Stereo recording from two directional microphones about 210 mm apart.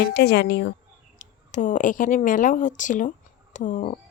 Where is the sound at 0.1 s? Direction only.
50° left (ahead or behind).